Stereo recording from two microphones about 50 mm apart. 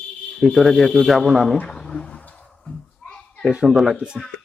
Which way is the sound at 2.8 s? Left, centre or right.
Centre.